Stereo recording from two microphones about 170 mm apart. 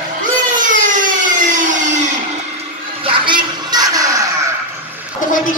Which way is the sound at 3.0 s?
30° right (ahead or behind).